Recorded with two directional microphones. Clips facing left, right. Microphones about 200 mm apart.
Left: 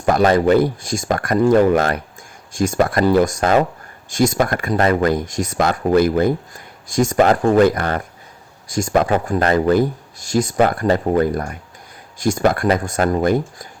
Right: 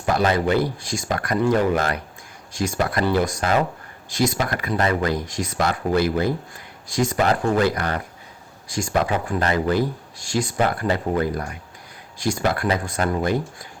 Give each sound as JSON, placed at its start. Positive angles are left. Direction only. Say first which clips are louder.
{"t": 0.0, "sound": "speech", "louder": "left 6 dB", "side_deg": 50}